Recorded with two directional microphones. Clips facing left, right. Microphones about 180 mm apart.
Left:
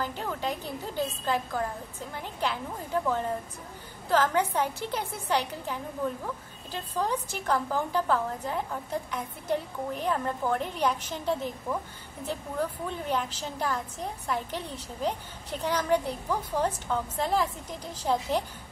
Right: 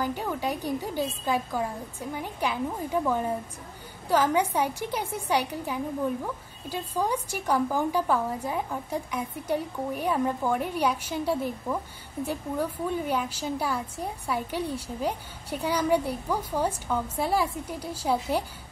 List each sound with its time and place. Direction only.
0.0 s a woman's voice: 10° right (ahead or behind)